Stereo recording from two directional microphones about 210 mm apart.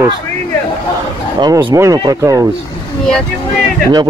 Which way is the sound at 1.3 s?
20° right (ahead or behind).